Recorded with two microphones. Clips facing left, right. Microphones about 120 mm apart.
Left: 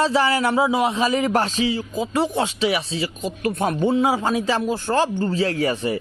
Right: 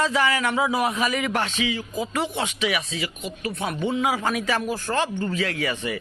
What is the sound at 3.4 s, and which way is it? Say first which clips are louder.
Speech: left 6 dB; 45° left (ahead or behind).